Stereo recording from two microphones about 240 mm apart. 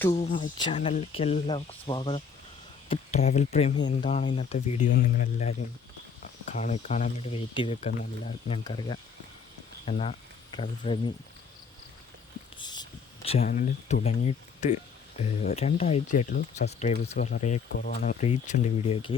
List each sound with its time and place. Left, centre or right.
0.1 s speech: left
4.9 s speech: left
12.5 s a sound: centre
13.4 s speech: left
17.7 s speech: left